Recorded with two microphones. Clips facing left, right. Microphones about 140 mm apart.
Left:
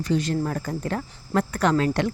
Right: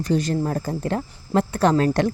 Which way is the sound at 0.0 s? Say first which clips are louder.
Right 2 dB; 40° right (ahead or behind).